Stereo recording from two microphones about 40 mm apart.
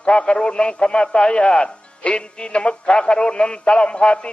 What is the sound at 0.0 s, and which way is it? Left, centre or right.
A man's voice, left.